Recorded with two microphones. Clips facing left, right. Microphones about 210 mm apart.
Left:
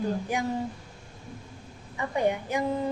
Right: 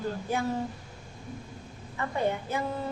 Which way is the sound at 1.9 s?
15° left (ahead or behind).